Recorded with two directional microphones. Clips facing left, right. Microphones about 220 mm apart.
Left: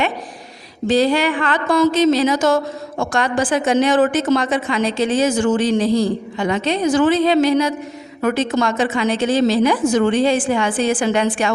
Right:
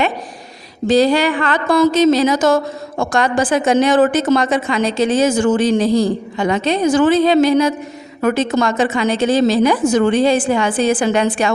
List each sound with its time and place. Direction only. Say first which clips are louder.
0.9 s a woman's voice: right 3 dB; 40° right (ahead or behind)